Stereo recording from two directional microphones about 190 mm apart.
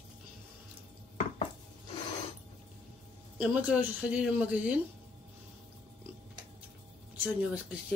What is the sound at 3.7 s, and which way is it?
A woman's voice, 5° right (ahead or behind).